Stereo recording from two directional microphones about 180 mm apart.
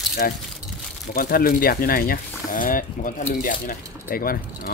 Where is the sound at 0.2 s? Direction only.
55° left (ahead or behind).